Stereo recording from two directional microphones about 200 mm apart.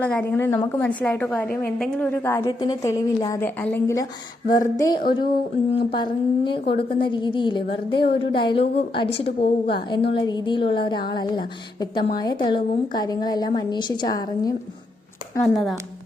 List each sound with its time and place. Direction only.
0.0 s a woman's voice: 10° left (ahead or behind)
4.9 s speech: 50° left (ahead or behind)
5.7 s a woman's voice: 25° left (ahead or behind)
15.5 s speech: centre (ahead or behind)